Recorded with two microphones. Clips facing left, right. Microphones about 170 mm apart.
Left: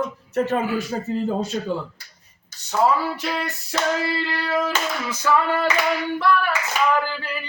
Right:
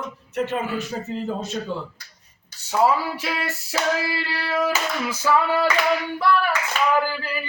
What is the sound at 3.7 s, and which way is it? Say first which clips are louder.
Singing: left 1 dB; 5° right (ahead or behind).